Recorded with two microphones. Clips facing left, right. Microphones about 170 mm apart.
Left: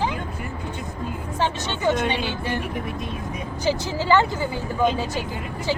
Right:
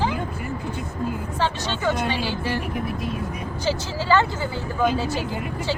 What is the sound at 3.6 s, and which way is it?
Speech, 15° left (ahead or behind).